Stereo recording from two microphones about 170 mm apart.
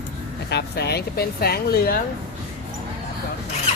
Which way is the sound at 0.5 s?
75° left (ahead or behind).